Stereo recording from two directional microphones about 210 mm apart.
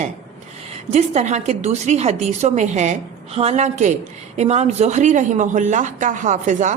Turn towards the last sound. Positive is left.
turn(degrees=-35)  # may be behind; listen again after turning